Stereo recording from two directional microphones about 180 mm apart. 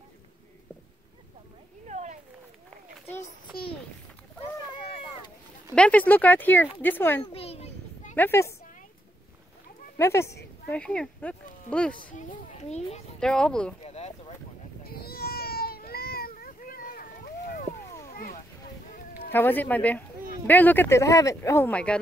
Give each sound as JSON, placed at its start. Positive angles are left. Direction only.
{"t": 1.9, "sound": "a sound", "side_deg": -40}
{"t": 3.2, "sound": "a sound", "side_deg": 30}
{"t": 5.8, "sound": "speech", "side_deg": 10}
{"t": 7.3, "sound": "a sound", "side_deg": 35}
{"t": 8.2, "sound": "speech", "side_deg": 15}
{"t": 9.9, "sound": "speech", "side_deg": 15}
{"t": 11.9, "sound": "a child's voice", "side_deg": 50}
{"t": 13.2, "sound": "speech", "side_deg": 5}
{"t": 13.8, "sound": "boat", "side_deg": 35}
{"t": 14.8, "sound": "baby cry", "side_deg": 60}
{"t": 18.1, "sound": "a sound", "side_deg": 50}
{"t": 19.3, "sound": "speech", "side_deg": 10}